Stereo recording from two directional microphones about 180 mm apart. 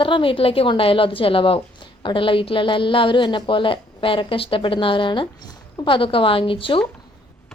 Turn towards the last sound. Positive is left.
turn(degrees=30)  # may be behind; listen again after turning